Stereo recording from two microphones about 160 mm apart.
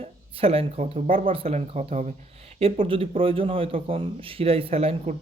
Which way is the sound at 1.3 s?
35° right (ahead or behind).